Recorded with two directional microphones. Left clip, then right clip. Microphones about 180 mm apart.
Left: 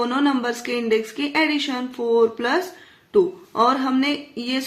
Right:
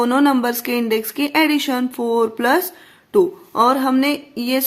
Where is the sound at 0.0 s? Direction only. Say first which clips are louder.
Right 5 dB; 40° right (ahead or behind).